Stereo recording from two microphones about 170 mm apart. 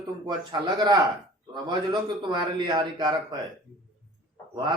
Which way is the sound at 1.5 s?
25° right (ahead or behind).